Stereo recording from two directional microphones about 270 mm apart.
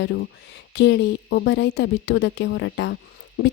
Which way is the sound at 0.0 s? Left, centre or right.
Left.